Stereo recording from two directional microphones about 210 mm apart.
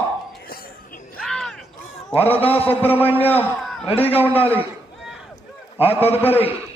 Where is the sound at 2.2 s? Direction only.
30° left (ahead or behind).